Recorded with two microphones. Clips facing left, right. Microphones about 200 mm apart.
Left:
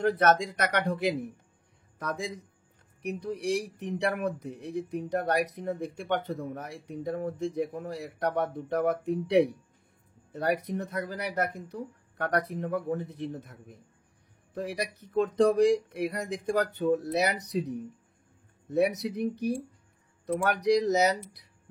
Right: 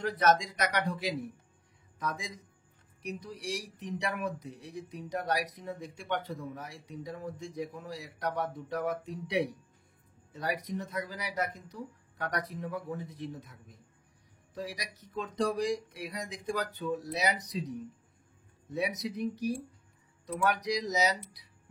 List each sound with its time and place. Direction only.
0.0 s speech: 55° left (ahead or behind)